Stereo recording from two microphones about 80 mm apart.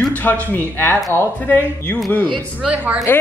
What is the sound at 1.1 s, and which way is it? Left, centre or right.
Speech, left.